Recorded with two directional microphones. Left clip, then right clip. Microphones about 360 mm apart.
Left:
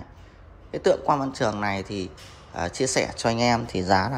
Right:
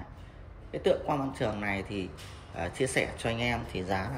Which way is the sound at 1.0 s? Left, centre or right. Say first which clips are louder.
Left 8 dB; centre.